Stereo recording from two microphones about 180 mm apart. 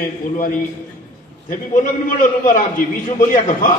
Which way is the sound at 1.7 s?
50° left (ahead or behind).